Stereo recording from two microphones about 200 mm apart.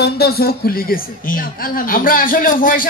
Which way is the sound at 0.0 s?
50° left (ahead or behind).